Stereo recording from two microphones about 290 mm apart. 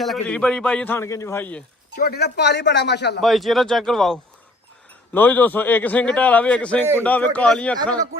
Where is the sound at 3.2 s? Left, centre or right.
Centre.